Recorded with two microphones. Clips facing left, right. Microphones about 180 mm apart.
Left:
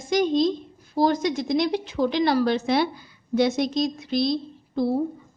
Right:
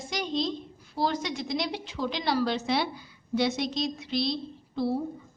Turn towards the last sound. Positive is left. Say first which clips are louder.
# left 5 dB
turn(degrees=45)  # may be behind; listen again after turning